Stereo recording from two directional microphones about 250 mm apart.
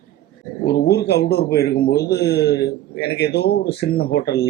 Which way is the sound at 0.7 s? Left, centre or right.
Left.